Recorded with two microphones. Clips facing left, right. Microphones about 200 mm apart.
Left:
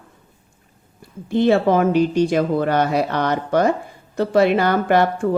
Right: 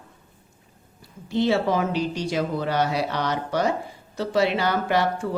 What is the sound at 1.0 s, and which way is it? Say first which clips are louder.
Speech: left 5 dB; 55° left (ahead or behind).